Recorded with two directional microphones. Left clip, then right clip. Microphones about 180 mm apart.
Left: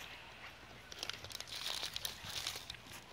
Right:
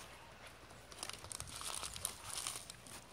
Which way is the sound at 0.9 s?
45° right (ahead or behind).